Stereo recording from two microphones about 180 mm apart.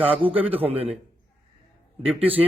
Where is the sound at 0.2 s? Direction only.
30° right (ahead or behind).